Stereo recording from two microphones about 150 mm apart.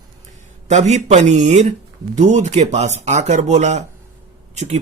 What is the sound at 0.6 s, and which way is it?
Speech, 50° right (ahead or behind).